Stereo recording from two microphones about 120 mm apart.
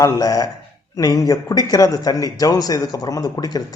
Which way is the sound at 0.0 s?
30° left (ahead or behind).